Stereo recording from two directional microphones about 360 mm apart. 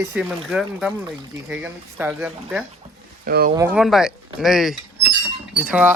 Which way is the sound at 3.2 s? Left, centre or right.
Right.